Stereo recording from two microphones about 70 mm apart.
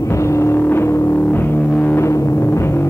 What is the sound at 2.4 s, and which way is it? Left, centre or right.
Music, left.